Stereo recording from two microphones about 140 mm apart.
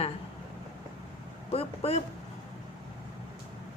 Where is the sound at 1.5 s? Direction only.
45° left (ahead or behind).